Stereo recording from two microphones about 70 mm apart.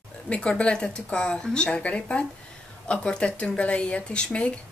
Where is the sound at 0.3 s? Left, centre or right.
Centre.